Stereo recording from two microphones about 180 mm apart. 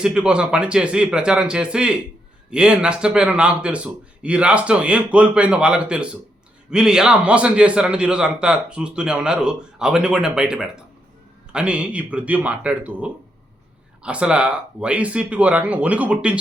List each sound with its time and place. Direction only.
0.0 s a man's voice: 5° right (ahead or behind)